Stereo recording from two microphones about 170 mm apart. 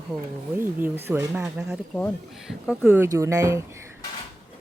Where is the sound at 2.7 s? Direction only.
10° right (ahead or behind).